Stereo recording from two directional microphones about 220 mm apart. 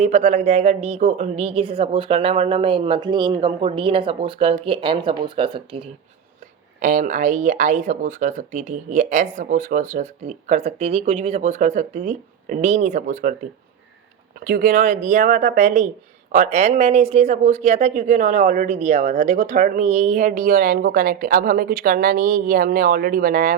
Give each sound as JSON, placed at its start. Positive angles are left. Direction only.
{"t": 0.0, "sound": "a woman's voice", "side_deg": -30}
{"t": 6.7, "sound": "speech", "side_deg": -35}
{"t": 14.3, "sound": "speech", "side_deg": -40}